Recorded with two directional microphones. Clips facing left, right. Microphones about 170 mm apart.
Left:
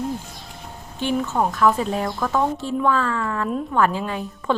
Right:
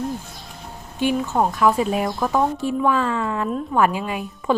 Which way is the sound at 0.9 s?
15° right (ahead or behind).